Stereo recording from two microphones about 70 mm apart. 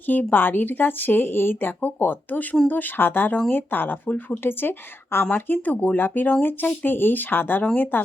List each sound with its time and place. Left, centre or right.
0.0 s speech: left